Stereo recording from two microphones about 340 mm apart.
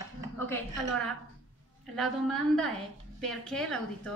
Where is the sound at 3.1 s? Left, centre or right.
Centre.